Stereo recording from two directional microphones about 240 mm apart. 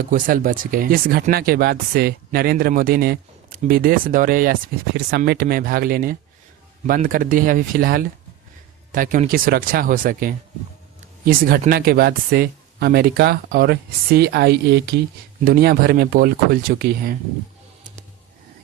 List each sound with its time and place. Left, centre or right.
0.1 s speech: right